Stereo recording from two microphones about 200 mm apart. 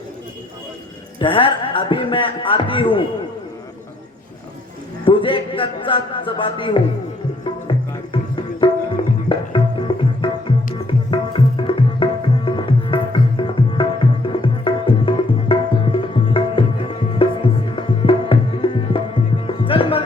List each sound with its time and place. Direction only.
1.2 s a man's voice: 25° left (ahead or behind)
5.0 s a man's voice: 25° left (ahead or behind)
7.7 s music: 25° left (ahead or behind)